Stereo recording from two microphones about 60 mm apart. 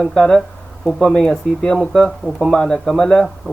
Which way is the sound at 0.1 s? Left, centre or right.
Centre.